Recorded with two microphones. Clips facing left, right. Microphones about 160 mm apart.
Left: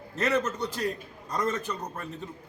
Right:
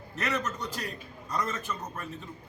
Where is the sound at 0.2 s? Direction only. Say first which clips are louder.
Left 5 dB; 35° left (ahead or behind).